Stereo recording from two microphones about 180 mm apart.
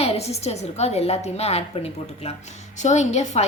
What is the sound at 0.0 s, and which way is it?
A woman's voice, 35° left (ahead or behind).